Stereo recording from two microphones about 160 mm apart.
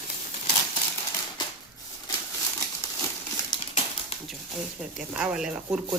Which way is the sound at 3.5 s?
40° left (ahead or behind).